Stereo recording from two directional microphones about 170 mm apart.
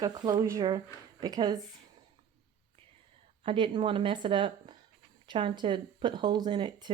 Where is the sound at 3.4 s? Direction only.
30° right (ahead or behind).